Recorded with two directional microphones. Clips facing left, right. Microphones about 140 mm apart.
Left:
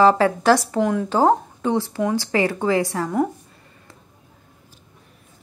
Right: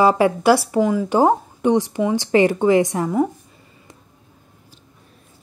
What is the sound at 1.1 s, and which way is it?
Speech, 15° right (ahead or behind).